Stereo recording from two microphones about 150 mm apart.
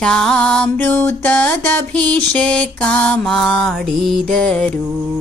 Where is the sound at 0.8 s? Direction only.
15° left (ahead or behind).